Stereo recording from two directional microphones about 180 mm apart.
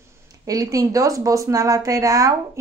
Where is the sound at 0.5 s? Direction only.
20° right (ahead or behind).